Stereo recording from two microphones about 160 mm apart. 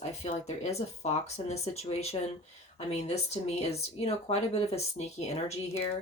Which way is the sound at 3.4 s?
40° left (ahead or behind).